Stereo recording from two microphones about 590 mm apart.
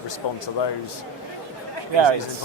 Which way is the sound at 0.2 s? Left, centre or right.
Left.